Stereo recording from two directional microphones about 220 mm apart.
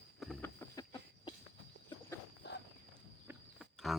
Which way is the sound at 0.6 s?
15° left (ahead or behind).